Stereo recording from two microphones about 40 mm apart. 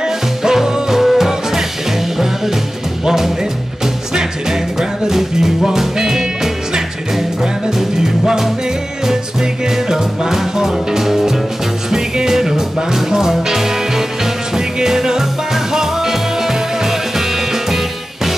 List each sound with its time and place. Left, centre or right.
0.0 s music: centre
4.1 s music: centre
8.0 s music: centre